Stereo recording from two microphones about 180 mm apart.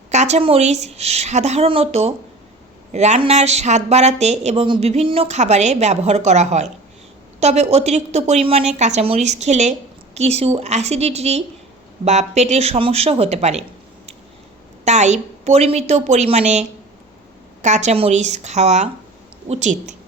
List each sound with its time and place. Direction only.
0.1 s speech: 40° right (ahead or behind)
14.8 s speech: 40° right (ahead or behind)